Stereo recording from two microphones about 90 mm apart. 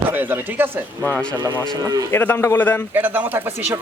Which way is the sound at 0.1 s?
20° right (ahead or behind).